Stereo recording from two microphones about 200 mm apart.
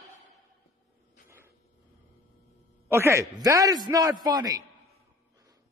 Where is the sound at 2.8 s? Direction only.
10° right (ahead or behind).